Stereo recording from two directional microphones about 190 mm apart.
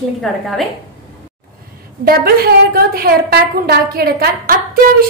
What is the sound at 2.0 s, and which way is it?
A woman's voice, 55° right (ahead or behind).